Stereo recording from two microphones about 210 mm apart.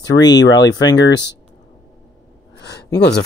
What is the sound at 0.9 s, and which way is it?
Speech, 55° left (ahead or behind).